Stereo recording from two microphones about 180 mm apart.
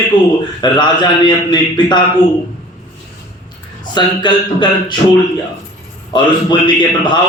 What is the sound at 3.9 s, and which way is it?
A man's voice, 25° left (ahead or behind).